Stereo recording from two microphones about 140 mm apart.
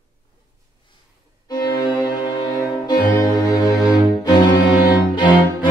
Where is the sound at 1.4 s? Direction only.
30° left (ahead or behind).